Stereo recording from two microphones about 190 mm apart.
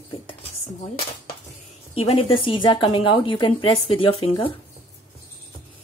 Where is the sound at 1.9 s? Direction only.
30° left (ahead or behind).